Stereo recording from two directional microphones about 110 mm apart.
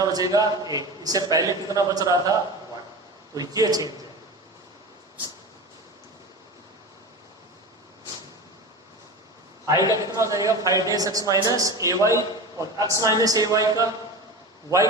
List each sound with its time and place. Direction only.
0.0 s a man's voice: 35° right (ahead or behind)
3.3 s a man's voice: 35° right (ahead or behind)
9.6 s a man's voice: 30° right (ahead or behind)